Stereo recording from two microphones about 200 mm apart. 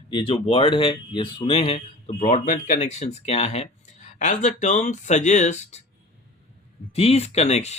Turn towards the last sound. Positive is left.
turn(degrees=35)  # may be behind; listen again after turning